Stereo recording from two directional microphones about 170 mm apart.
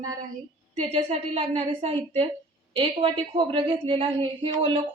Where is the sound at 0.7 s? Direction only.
40° right (ahead or behind).